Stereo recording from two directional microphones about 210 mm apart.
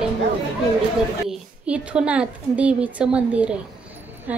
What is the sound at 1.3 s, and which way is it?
A woman's voice, 5° right (ahead or behind).